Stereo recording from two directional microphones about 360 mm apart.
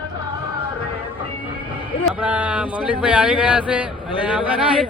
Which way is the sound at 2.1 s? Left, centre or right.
Centre.